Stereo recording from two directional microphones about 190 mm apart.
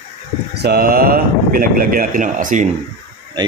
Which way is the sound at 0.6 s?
55° right (ahead or behind).